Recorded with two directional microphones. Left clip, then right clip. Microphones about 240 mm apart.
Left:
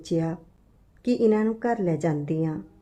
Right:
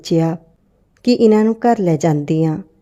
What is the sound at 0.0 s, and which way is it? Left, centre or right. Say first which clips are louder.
A woman's voice: right 10 dB; right.